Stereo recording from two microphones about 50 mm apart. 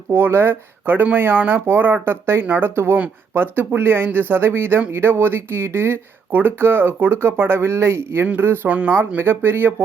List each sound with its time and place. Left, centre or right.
0.1 s speech: right
8.6 s speech: right
9.0 s speech: right